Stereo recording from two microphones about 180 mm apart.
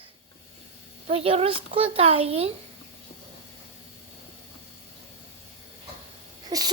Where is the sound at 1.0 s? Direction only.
35° right (ahead or behind).